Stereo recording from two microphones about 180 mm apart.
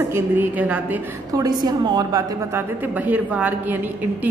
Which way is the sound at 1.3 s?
20° right (ahead or behind).